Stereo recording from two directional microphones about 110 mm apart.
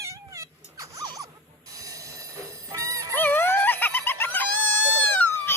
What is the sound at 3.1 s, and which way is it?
Dog, 20° left (ahead or behind).